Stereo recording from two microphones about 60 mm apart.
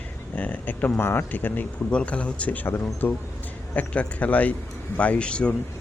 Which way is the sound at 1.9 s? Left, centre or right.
Left.